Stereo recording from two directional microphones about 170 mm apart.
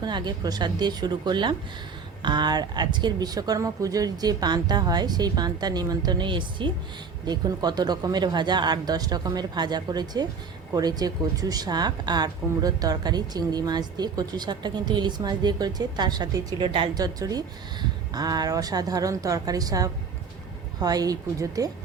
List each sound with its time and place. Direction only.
0.0 s speech: 25° right (ahead or behind)